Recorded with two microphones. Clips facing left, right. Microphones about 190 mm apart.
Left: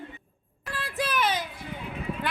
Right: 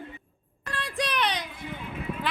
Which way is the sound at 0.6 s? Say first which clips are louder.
Even; 5° left (ahead or behind).